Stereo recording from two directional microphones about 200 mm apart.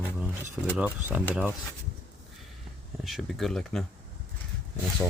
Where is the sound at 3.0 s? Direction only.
Centre (ahead or behind).